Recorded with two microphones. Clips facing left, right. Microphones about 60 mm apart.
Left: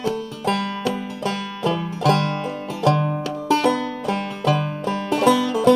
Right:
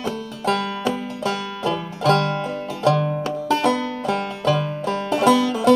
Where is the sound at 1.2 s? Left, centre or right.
Centre.